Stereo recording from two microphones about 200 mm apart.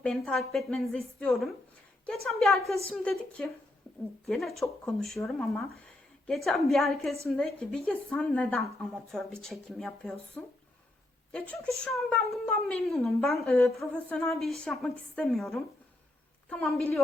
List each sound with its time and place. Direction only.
0.0 s speech: 5° left (ahead or behind)